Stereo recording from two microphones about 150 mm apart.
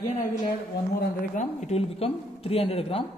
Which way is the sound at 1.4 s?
50° left (ahead or behind).